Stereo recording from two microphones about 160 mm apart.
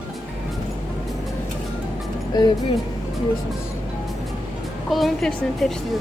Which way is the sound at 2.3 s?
25° left (ahead or behind).